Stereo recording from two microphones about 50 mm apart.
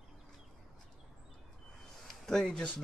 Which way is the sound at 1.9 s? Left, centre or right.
Centre.